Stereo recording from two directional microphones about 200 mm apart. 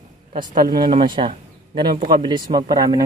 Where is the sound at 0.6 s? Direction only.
20° right (ahead or behind).